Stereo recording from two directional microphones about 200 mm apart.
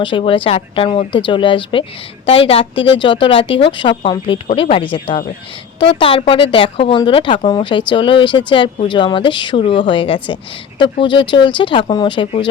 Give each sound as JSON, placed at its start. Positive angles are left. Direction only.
{"t": 0.0, "sound": "a woman's voice", "side_deg": 25}